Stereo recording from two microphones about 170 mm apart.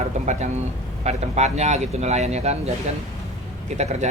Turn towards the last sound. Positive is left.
turn(degrees=-40)  # may be behind; listen again after turning